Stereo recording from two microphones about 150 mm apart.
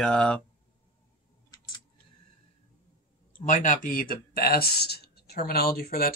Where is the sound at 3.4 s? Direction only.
60° left (ahead or behind).